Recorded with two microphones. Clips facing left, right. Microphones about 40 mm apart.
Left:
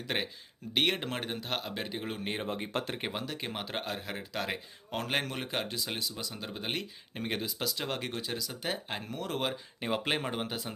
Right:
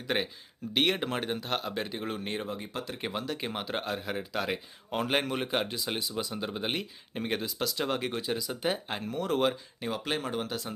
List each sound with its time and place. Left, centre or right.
0.1 s speech: centre
2.5 s speech: left
3.0 s speech: centre
9.8 s speech: left